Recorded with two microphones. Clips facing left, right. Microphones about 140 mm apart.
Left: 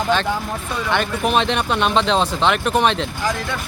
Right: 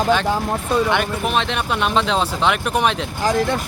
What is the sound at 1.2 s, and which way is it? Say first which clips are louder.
Speech: left 2 dB; centre (ahead or behind).